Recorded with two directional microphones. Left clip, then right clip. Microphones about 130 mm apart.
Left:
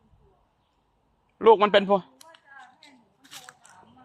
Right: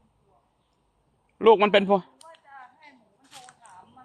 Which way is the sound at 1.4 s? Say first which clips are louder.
Even; 55° right (ahead or behind).